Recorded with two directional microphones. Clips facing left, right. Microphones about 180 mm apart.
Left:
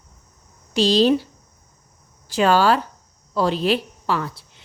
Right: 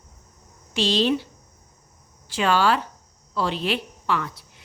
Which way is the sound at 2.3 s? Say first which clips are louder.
Left 4 dB; 40° left (ahead or behind).